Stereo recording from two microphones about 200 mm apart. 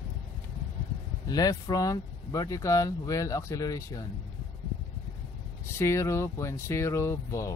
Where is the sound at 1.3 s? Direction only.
20° left (ahead or behind).